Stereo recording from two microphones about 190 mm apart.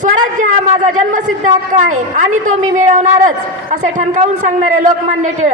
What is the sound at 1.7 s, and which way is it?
A woman's voice, 40° right (ahead or behind).